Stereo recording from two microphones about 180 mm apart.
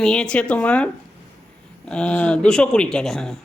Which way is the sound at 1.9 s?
5° left (ahead or behind).